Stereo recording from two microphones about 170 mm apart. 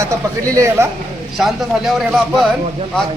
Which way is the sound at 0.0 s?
20° right (ahead or behind).